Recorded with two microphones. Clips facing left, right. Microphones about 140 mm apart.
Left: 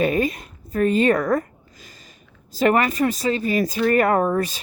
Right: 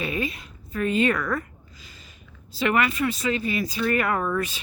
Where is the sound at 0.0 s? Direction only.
45° left (ahead or behind).